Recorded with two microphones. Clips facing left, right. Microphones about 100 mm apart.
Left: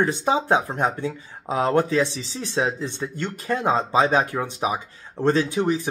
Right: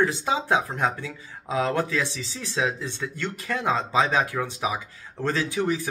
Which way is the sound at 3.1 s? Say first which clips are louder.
Left 4 dB; 40° left (ahead or behind).